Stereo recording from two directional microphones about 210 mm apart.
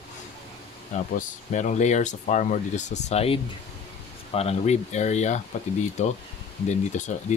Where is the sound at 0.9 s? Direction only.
35° left (ahead or behind).